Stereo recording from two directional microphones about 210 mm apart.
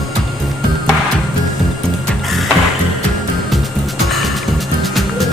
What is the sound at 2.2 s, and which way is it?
Music, centre (ahead or behind).